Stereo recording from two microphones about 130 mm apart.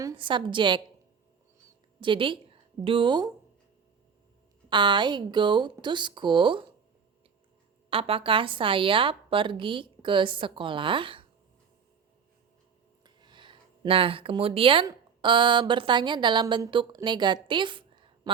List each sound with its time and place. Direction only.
0.2 s a woman's voice: 40° right (ahead or behind)
2.0 s a woman's voice: 40° right (ahead or behind)
4.7 s a woman's voice: 35° right (ahead or behind)
7.9 s a woman's voice: 45° right (ahead or behind)
13.1 s a sound: 35° right (ahead or behind)
14.8 s a woman's voice: 35° right (ahead or behind)